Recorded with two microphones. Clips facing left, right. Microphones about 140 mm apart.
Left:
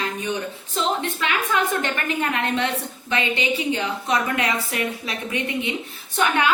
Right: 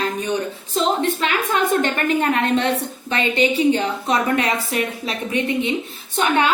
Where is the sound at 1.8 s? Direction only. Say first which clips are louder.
Right 5 dB; 35° right (ahead or behind).